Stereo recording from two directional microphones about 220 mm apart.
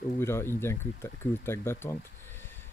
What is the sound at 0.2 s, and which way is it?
Speech, 10° left (ahead or behind).